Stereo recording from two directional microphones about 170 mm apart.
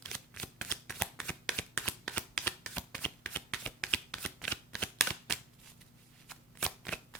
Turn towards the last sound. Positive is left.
turn(degrees=5)  # may be behind; listen again after turning